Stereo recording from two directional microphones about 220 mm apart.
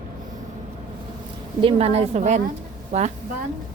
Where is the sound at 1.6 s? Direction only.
25° right (ahead or behind).